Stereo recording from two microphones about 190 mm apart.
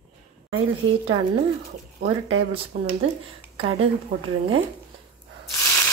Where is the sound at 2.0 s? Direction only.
55° right (ahead or behind).